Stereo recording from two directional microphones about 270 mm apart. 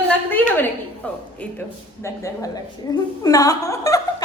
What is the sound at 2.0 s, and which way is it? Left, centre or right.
A woman's voice, centre.